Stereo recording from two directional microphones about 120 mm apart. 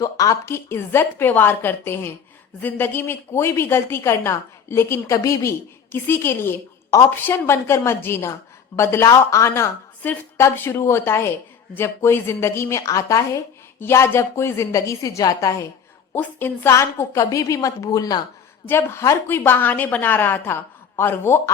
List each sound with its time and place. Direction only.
0.0 s a woman's voice: 30° left (ahead or behind)
18.7 s a woman's voice: 20° left (ahead or behind)